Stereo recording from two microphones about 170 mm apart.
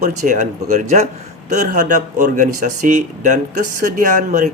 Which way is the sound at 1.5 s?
45° right (ahead or behind).